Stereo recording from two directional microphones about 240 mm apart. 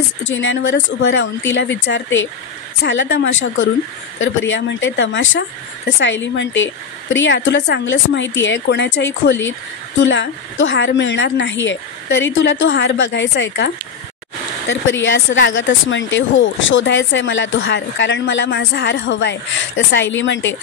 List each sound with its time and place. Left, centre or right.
0.2 s speech: left
14.7 s speech: left